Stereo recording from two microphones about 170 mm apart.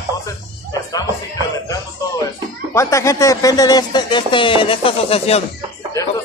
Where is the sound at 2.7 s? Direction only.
15° left (ahead or behind); by 5.4 s 35° left (ahead or behind).